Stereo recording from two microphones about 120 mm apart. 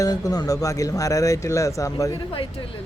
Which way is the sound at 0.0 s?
30° left (ahead or behind).